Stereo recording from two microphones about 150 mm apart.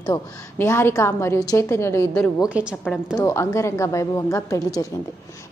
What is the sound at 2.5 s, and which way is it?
Speech, 10° right (ahead or behind).